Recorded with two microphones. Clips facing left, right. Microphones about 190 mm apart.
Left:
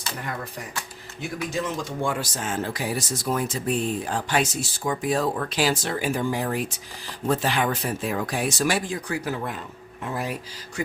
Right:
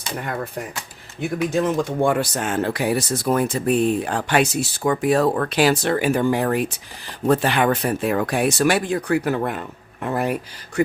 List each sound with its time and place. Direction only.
1.2 s speech: 55° right (ahead or behind)